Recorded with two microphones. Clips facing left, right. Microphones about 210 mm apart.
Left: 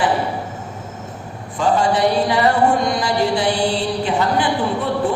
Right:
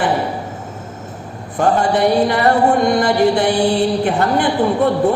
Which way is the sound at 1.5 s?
60° right (ahead or behind).